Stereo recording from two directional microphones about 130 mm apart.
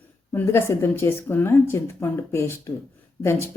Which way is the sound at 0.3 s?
15° left (ahead or behind).